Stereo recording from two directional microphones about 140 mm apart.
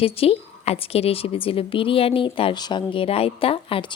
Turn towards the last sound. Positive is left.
turn(degrees=40)  # may be behind; listen again after turning